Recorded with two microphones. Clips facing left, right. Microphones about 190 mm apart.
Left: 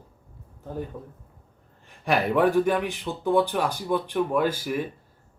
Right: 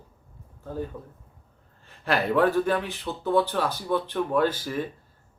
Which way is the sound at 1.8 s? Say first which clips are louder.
Left 1 dB; 15° left (ahead or behind).